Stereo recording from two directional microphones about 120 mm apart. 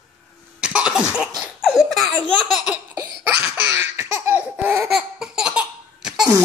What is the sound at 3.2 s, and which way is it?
Laughter, 15° right (ahead or behind).